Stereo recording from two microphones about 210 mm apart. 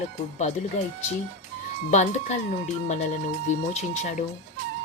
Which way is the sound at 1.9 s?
35° left (ahead or behind).